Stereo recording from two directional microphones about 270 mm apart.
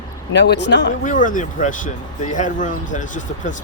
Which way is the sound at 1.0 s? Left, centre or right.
Left.